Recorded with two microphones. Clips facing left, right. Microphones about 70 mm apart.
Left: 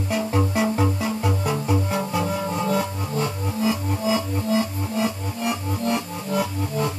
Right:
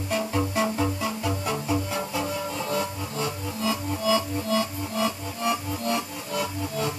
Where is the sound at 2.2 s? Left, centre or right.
Left.